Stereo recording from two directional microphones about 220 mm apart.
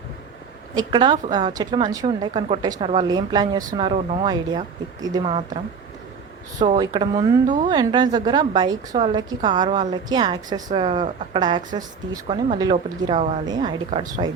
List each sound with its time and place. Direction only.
0.8 s a woman's voice: 20° right (ahead or behind)
6.6 s a woman's voice: 20° right (ahead or behind)
7.4 s a woman's voice: 35° right (ahead or behind)
7.7 s a woman's voice: 20° right (ahead or behind)
13.4 s a woman's voice: 20° right (ahead or behind)